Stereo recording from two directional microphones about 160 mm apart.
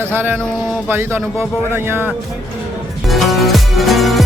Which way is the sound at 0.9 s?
15° right (ahead or behind).